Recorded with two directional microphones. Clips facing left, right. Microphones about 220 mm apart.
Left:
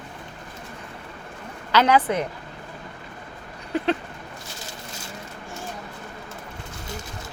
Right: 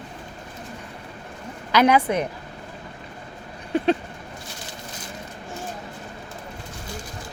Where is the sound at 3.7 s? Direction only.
20° right (ahead or behind).